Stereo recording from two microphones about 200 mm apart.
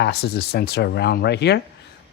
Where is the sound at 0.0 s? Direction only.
55° left (ahead or behind).